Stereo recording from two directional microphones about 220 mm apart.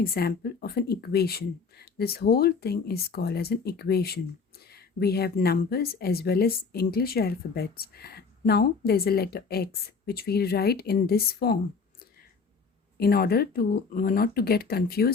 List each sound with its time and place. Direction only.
0.0 s speech: 45° left (ahead or behind)
13.0 s speech: 45° left (ahead or behind)